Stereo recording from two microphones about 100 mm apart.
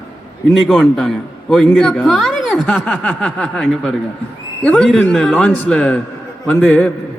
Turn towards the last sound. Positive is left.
turn(degrees=10)  # may be behind; listen again after turning